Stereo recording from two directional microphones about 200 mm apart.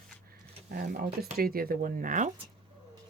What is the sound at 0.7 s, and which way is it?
Speech, 50° right (ahead or behind).